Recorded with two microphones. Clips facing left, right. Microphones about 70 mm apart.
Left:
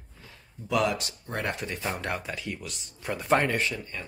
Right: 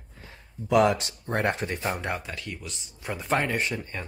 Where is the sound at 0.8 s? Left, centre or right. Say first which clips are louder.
Right 5 dB; right.